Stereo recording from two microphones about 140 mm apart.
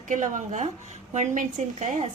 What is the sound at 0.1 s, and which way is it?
A woman's voice, 65° right (ahead or behind).